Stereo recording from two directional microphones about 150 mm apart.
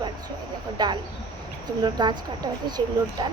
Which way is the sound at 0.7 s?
30° right (ahead or behind).